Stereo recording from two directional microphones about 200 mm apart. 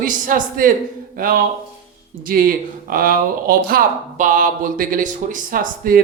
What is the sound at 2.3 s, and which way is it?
Speech, 45° right (ahead or behind).